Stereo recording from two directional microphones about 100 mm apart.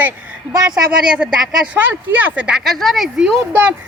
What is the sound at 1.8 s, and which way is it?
Speech, 15° right (ahead or behind).